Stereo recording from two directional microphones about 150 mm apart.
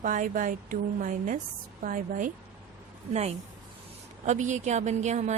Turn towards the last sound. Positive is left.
turn(degrees=-50)  # may be behind; listen again after turning